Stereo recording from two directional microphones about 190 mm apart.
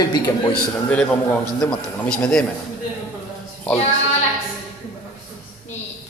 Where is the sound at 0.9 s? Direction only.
5° left (ahead or behind).